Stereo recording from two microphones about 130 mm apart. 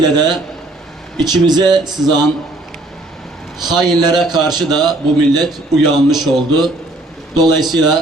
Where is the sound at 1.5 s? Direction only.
35° right (ahead or behind).